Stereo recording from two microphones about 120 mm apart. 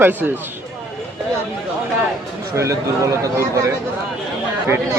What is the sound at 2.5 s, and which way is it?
Speech, 25° right (ahead or behind).